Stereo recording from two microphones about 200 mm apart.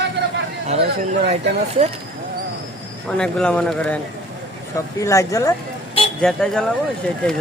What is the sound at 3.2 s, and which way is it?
Speech, 5° left (ahead or behind).